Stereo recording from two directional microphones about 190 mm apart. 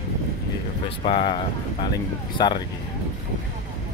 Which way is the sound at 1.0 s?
30° left (ahead or behind).